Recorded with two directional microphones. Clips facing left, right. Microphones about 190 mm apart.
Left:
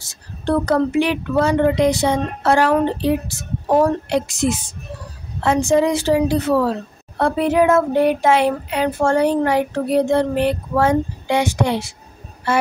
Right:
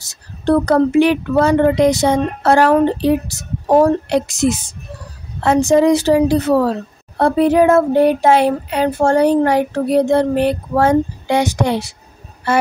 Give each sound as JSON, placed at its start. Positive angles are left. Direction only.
{"t": 0.1, "sound": "speech", "side_deg": -40}